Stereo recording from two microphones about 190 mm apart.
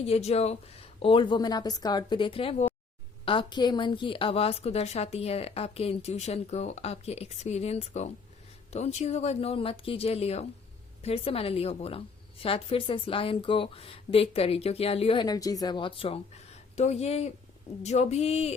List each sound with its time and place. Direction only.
0.0 s a woman's voice: 35° left (ahead or behind)